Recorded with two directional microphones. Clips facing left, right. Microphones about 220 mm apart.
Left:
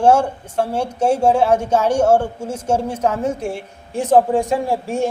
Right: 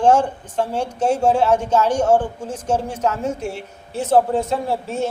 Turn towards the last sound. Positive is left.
turn(degrees=15)  # may be behind; listen again after turning